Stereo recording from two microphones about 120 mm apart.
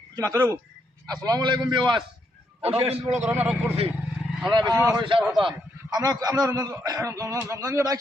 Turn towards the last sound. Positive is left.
turn(degrees=-30)  # may be behind; listen again after turning